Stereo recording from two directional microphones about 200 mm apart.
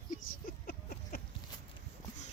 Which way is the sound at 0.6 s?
50° left (ahead or behind).